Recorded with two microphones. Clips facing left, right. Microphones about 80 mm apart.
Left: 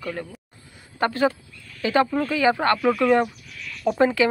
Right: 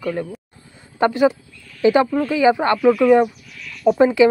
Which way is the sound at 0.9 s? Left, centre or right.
Centre.